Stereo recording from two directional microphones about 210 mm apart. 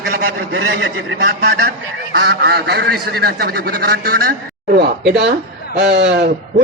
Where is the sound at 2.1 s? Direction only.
50° right (ahead or behind).